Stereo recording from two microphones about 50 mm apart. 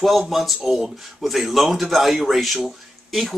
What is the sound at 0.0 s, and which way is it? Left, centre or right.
Speech, centre.